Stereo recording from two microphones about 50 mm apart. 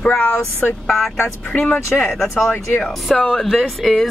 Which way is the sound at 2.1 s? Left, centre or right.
Centre.